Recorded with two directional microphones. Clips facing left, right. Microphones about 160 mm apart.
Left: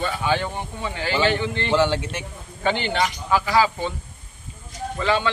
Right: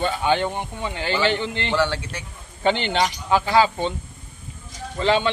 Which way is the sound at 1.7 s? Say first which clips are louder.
Left 3 dB; 15° left (ahead or behind).